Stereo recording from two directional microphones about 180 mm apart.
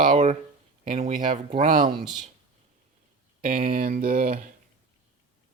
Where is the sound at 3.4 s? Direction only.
50° right (ahead or behind).